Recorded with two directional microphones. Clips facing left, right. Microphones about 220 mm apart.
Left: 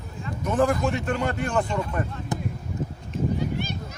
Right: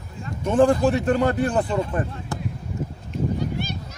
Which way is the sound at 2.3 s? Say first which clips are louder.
Left 3 dB; 20° left (ahead or behind).